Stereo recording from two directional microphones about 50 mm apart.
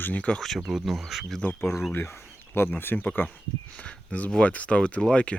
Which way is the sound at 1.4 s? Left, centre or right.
Left.